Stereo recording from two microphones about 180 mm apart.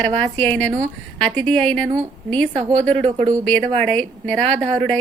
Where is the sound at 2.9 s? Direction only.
30° right (ahead or behind).